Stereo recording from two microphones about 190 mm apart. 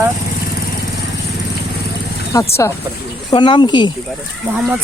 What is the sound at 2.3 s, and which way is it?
Speech, 15° left (ahead or behind).